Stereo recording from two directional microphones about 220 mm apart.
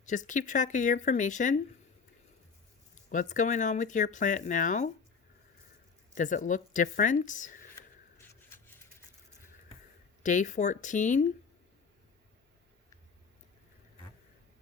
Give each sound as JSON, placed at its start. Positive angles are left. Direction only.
{"t": 0.0, "sound": "speech", "side_deg": 35}
{"t": 2.9, "sound": "speech", "side_deg": 35}
{"t": 6.1, "sound": "speech", "side_deg": 35}
{"t": 8.2, "sound": "a sound", "side_deg": 10}
{"t": 10.2, "sound": "speech", "side_deg": 35}